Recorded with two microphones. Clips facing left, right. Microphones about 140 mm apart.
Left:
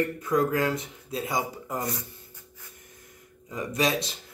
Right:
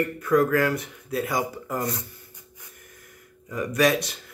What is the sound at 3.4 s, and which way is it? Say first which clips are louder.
Speech: right 5 dB; 20° left (ahead or behind).